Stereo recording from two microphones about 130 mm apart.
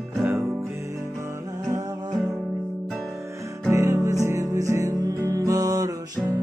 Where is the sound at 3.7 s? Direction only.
25° right (ahead or behind).